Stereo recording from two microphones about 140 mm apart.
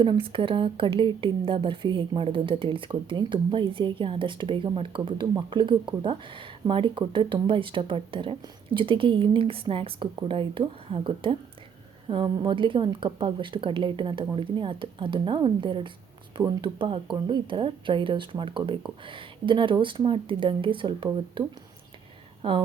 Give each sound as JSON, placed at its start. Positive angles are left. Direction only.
{"t": 0.0, "sound": "speech", "side_deg": -35}
{"t": 22.4, "sound": "speech", "side_deg": -40}